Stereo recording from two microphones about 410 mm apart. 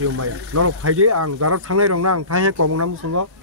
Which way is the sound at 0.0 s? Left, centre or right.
Right.